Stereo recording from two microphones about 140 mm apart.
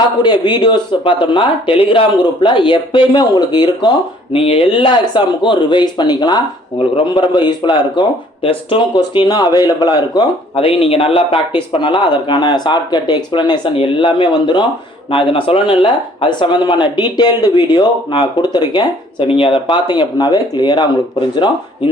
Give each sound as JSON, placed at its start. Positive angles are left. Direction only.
{"t": 0.2, "sound": "speech", "side_deg": 30}
{"t": 10.5, "sound": "speech", "side_deg": 40}